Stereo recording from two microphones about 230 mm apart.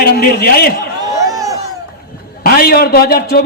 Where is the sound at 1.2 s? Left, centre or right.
Centre.